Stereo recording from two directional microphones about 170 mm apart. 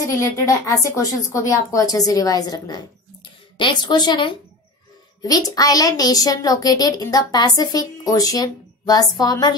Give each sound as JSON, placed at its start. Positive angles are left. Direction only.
{"t": 0.0, "sound": "a woman's voice", "side_deg": 15}